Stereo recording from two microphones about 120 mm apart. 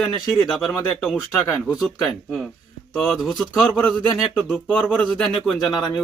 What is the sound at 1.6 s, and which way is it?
A man's voice, centre (ahead or behind).